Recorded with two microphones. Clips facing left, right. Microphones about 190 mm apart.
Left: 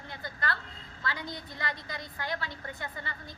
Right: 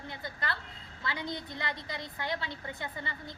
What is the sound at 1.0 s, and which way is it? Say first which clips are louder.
A woman's voice: right 1 dB; 20° right (ahead or behind).